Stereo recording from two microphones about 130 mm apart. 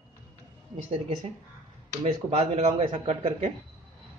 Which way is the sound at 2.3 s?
55° right (ahead or behind).